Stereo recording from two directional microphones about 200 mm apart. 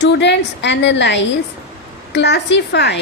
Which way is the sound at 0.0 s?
60° left (ahead or behind).